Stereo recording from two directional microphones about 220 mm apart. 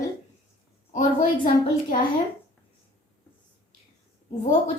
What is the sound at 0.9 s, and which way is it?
Speech, 35° left (ahead or behind).